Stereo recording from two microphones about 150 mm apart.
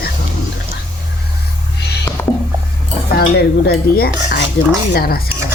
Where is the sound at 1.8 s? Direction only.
90° left.